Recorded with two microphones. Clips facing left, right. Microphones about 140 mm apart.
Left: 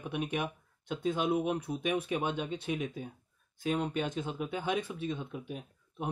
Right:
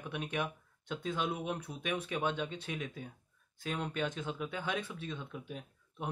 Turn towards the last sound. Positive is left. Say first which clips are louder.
# left 3 dB
turn(degrees=20)  # may be behind; listen again after turning